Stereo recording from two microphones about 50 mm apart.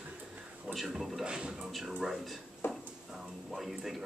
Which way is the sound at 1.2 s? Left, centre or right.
Centre.